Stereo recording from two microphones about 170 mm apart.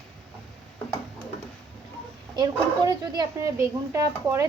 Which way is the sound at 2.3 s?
25° right (ahead or behind).